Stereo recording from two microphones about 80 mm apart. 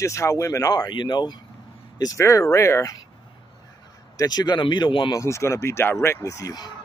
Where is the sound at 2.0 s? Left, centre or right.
Left.